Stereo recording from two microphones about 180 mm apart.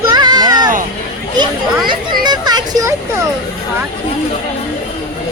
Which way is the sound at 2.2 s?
25° right (ahead or behind).